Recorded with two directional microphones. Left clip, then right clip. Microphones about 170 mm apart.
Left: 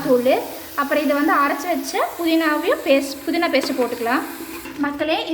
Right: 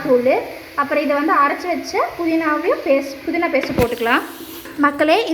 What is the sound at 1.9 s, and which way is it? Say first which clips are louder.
A woman's voice: right 1 dB; 15° left (ahead or behind).